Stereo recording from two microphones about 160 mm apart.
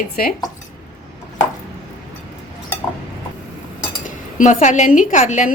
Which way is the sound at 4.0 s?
55° left (ahead or behind).